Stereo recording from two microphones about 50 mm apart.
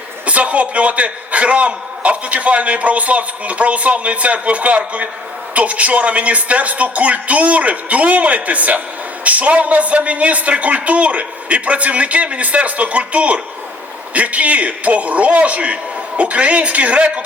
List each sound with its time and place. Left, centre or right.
0.3 s a man's voice: right